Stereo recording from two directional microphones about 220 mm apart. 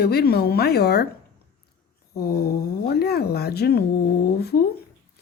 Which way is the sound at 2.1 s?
45° left (ahead or behind).